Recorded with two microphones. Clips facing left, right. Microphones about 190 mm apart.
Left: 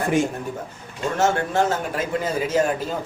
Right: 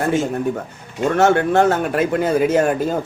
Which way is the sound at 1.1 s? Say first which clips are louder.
Right 6 dB; 65° right (ahead or behind).